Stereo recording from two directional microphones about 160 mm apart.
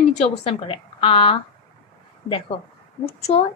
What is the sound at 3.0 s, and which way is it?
Speech, 40° left (ahead or behind).